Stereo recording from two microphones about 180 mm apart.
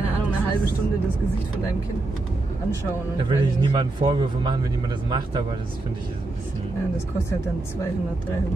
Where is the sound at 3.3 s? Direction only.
30° right (ahead or behind).